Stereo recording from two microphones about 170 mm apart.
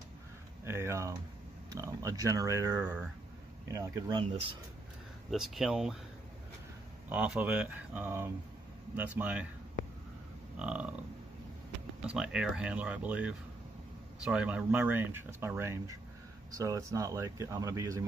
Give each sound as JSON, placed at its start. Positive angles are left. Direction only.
{"t": 0.7, "sound": "a sound", "side_deg": -15}
{"t": 1.7, "sound": "speech", "side_deg": -20}
{"t": 5.3, "sound": "speech", "side_deg": 0}
{"t": 7.1, "sound": "speech", "side_deg": -10}
{"t": 10.6, "sound": "speech", "side_deg": -5}
{"t": 12.1, "sound": "speech", "side_deg": -5}